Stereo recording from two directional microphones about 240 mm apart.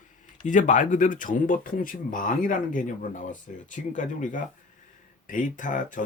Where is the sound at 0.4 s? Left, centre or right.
Left.